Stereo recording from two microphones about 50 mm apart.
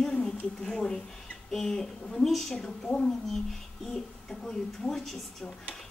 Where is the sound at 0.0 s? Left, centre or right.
Centre.